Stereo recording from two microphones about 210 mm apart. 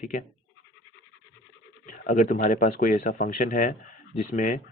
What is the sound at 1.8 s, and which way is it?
Speech, 40° left (ahead or behind).